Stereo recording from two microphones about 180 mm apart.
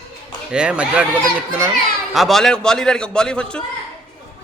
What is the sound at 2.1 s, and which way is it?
Speech, centre (ahead or behind).